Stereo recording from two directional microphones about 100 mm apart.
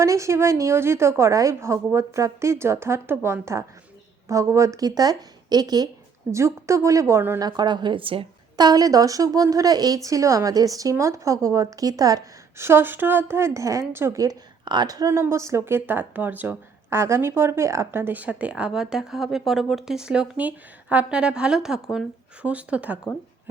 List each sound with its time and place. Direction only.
0.0 s a woman's voice: 30° right (ahead or behind)
6.3 s a woman's voice: 30° right (ahead or behind)
7.3 s speech: 45° right (ahead or behind); by 8.3 s 65° right (ahead or behind)
8.5 s a woman's voice: 40° right (ahead or behind)
12.5 s a woman's voice: 25° right (ahead or behind); by 15.1 s 40° right (ahead or behind)
15.1 s speech: 25° right (ahead or behind)